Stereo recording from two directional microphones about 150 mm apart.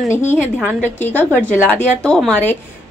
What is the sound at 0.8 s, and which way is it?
A woman's voice, 10° left (ahead or behind).